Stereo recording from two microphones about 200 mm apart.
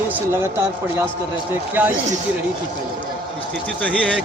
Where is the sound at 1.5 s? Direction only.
10° right (ahead or behind).